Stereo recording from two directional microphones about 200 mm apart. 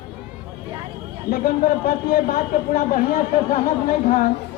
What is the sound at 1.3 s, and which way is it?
A man's voice, 45° left (ahead or behind).